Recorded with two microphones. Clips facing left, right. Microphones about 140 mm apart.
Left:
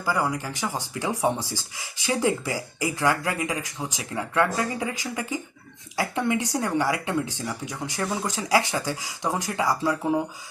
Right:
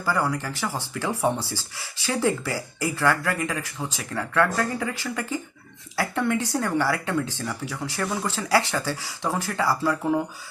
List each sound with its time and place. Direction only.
0.0 s speech: 15° left (ahead or behind)